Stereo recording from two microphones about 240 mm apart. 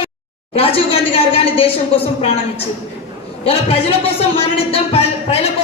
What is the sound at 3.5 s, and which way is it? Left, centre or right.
Speech, left.